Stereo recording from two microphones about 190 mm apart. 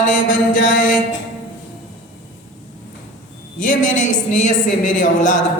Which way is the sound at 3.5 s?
45° left (ahead or behind).